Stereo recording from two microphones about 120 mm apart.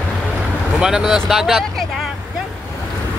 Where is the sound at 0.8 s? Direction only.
5° right (ahead or behind).